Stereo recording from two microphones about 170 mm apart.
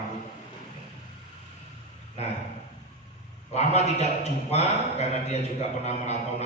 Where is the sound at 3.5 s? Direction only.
40° left (ahead or behind).